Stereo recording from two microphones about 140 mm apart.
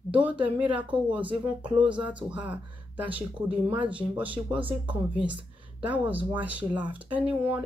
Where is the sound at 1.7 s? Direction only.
10° right (ahead or behind).